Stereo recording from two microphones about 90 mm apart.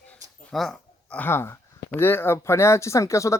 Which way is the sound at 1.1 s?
25° left (ahead or behind).